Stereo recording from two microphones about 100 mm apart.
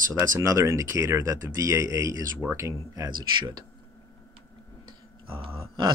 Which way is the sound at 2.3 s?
20° right (ahead or behind).